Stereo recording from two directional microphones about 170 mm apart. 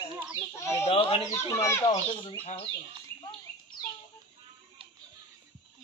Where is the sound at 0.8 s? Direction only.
35° left (ahead or behind).